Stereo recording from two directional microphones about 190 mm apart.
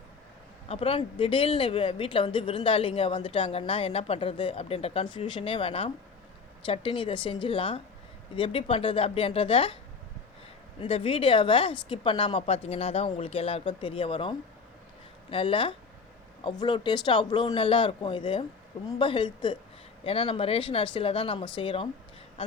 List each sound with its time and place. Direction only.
0.7 s a woman's voice: 30° left (ahead or behind)
10.8 s a woman's voice: 30° left (ahead or behind)